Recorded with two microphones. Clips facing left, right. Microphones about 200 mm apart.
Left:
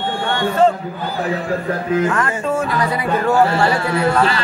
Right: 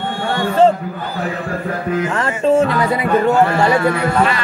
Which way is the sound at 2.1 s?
25° right (ahead or behind).